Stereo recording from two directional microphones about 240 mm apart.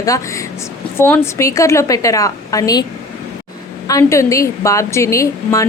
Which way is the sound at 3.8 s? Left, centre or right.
Centre.